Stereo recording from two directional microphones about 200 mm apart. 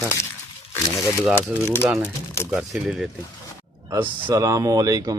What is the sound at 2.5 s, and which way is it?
A man's voice, 5° right (ahead or behind).